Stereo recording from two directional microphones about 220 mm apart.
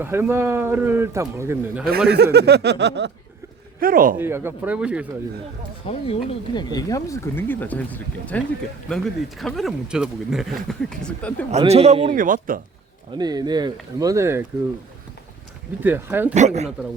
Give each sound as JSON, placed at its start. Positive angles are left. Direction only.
{"t": 0.0, "sound": "speech", "side_deg": -10}
{"t": 1.9, "sound": "speech", "side_deg": -45}
{"t": 3.8, "sound": "speech", "side_deg": -40}
{"t": 4.2, "sound": "speech", "side_deg": -10}
{"t": 5.8, "sound": "speech", "side_deg": 25}
{"t": 9.4, "sound": "speech", "side_deg": 0}
{"t": 11.5, "sound": "a man's voice", "side_deg": -30}
{"t": 12.1, "sound": "speech", "side_deg": -35}
{"t": 13.1, "sound": "speech", "side_deg": -20}
{"t": 15.8, "sound": "speech", "side_deg": -10}
{"t": 16.3, "sound": "speech", "side_deg": -30}